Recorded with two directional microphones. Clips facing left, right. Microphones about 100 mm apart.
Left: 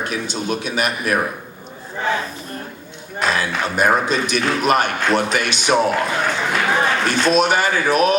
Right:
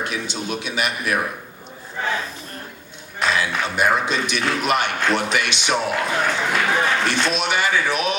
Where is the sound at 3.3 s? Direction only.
45° left (ahead or behind).